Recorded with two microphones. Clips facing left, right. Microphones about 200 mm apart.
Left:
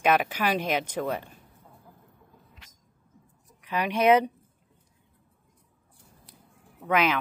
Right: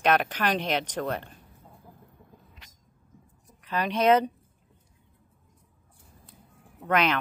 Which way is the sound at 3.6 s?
10° left (ahead or behind).